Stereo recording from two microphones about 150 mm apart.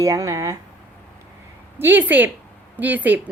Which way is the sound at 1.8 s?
15° right (ahead or behind).